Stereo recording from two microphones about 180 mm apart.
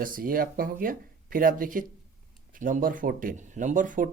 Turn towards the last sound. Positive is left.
turn(degrees=-45)  # may be behind; listen again after turning